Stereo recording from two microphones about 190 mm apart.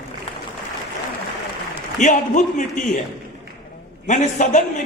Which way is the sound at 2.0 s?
40° left (ahead or behind).